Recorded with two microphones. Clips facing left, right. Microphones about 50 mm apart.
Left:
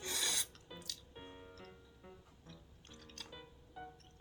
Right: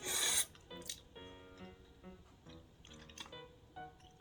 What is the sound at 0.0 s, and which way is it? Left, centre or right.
Filing, centre.